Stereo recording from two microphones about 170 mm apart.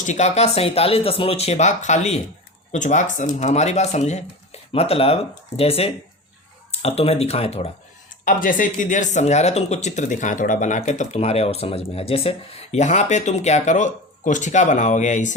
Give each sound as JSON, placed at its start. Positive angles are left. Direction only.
{"t": 0.0, "sound": "speech", "side_deg": 45}
{"t": 8.2, "sound": "speech", "side_deg": 50}